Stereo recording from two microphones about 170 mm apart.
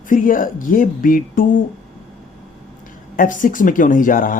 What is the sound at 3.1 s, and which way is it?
Speech, 50° left (ahead or behind).